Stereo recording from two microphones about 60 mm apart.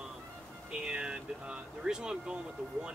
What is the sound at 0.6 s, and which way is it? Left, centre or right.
Speech, centre.